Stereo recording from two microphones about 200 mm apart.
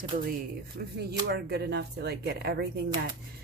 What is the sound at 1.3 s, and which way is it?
Speech, 55° right (ahead or behind).